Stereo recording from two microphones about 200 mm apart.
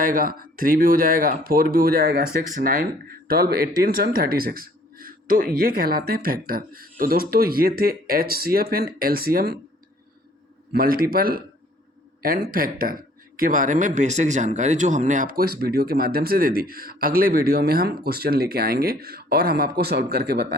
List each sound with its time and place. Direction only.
0.0 s speech: 45° right (ahead or behind)
10.7 s speech: 50° right (ahead or behind)